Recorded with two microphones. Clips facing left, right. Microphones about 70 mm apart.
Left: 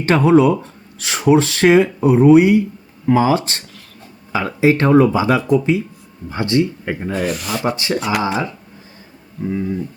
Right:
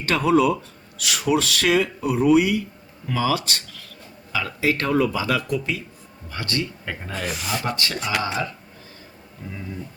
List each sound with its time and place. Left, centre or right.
0.0 s speech: left
7.1 s speech: centre
7.6 s speech: centre
9.4 s speech: left